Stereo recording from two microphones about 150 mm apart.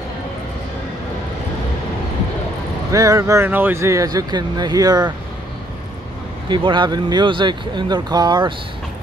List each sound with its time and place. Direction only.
2.9 s speech: 20° right (ahead or behind)
6.5 s speech: 30° right (ahead or behind)